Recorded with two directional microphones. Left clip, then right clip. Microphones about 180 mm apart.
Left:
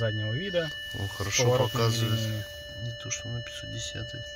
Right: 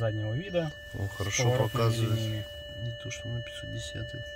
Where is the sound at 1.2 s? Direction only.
10° right (ahead or behind).